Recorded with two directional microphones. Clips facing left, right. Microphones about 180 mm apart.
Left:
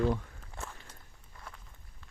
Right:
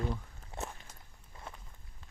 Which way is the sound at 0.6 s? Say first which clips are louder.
Right 3 dB; 20° right (ahead or behind).